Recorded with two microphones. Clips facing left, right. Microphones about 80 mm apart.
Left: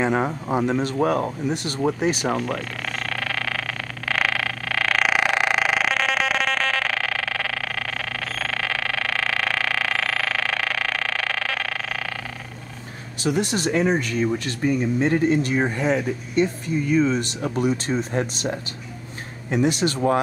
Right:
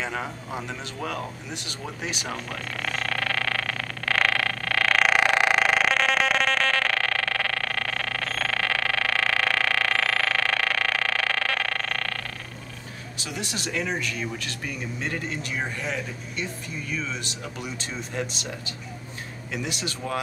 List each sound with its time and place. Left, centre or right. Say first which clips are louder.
0.0 s speech: left 9 dB; left
2.3 s vehicle: left 7 dB; centre
13.2 s speech: left 11 dB; left